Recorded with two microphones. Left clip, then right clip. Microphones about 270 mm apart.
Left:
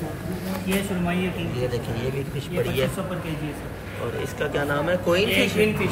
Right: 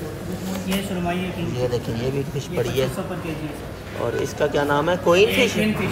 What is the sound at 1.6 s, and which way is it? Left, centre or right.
Speech, centre.